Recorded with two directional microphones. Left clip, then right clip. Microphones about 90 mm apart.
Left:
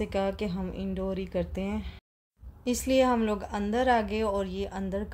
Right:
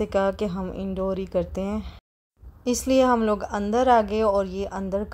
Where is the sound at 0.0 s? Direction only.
40° right (ahead or behind).